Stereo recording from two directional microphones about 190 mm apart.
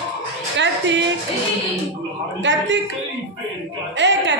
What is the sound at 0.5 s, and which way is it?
Speech, 70° right (ahead or behind).